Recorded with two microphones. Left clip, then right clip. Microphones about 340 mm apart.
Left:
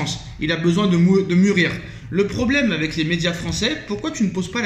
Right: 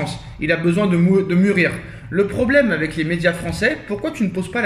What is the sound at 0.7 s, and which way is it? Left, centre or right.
Speech, right.